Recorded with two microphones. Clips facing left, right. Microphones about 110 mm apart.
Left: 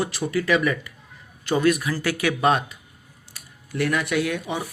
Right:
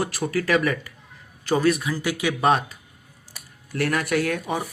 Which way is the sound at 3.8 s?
45° right (ahead or behind).